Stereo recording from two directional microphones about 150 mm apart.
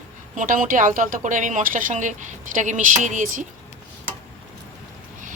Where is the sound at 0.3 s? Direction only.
60° right (ahead or behind).